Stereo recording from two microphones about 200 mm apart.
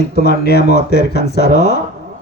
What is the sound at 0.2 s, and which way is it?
Speech, 50° left (ahead or behind).